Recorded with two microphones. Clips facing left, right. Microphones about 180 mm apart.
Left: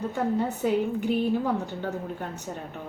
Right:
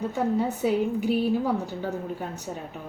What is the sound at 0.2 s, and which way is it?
Speech, 5° right (ahead or behind).